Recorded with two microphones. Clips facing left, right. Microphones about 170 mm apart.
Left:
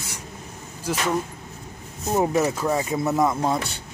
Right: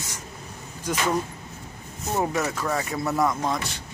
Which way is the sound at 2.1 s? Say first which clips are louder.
Left 4 dB; 15° left (ahead or behind).